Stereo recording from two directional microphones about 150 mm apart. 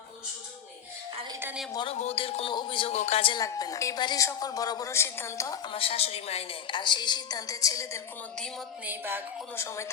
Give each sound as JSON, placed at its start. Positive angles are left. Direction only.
{"t": 1.3, "sound": "a sound", "side_deg": -15}
{"t": 1.7, "sound": "a woman's voice", "side_deg": 30}
{"t": 2.0, "sound": "a woman's voice", "side_deg": 40}
{"t": 2.9, "sound": "a woman's voice", "side_deg": 45}
{"t": 3.4, "sound": "a woman's voice", "side_deg": 20}
{"t": 5.7, "sound": "a woman's voice", "side_deg": 40}
{"t": 8.9, "sound": "a woman's voice", "side_deg": -15}
{"t": 9.6, "sound": "a woman's voice", "side_deg": 20}